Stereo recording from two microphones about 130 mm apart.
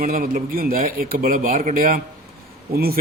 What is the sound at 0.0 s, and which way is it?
A man's voice, 90° right.